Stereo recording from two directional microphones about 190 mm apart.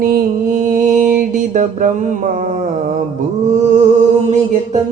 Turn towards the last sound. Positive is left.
turn(degrees=-35)  # may be behind; listen again after turning